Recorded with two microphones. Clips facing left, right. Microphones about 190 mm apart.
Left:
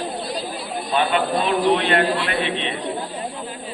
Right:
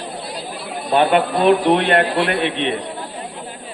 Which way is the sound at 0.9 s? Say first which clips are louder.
Right 5 dB; 55° right (ahead or behind).